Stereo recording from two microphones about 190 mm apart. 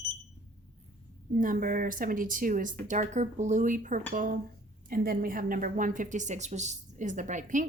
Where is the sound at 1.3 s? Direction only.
45° right (ahead or behind).